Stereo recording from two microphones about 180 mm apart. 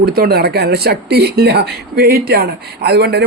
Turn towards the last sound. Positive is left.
turn(degrees=-65)  # may be behind; listen again after turning